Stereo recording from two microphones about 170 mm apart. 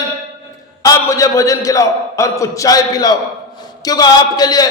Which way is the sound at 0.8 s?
20° left (ahead or behind).